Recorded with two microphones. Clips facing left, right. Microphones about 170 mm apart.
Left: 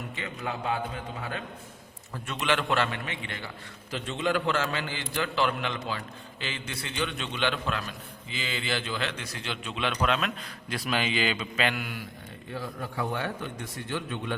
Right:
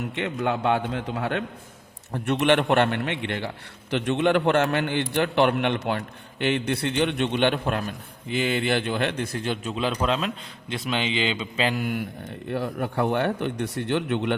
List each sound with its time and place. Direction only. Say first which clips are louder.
0.1 s a man's voice: right 10 dB; 70° right (ahead or behind)
2.1 s a man's voice: right 8 dB; 65° right (ahead or behind); by 11.8 s 30° right (ahead or behind)
11.8 s a man's voice: right 10 dB; 50° right (ahead or behind)
12.5 s a man's voice: right 8 dB; 65° right (ahead or behind)